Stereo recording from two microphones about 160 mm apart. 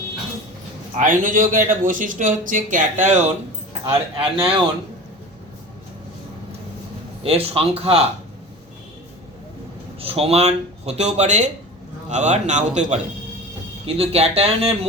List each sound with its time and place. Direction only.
0.9 s speech: 55° right (ahead or behind)
3.8 s speech: 35° right (ahead or behind)
7.2 s speech: 35° right (ahead or behind)
10.0 s speech: 40° right (ahead or behind)